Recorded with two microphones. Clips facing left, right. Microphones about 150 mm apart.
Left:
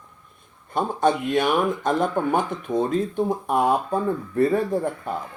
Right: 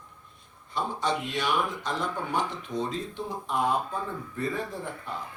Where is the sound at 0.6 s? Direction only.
50° left (ahead or behind).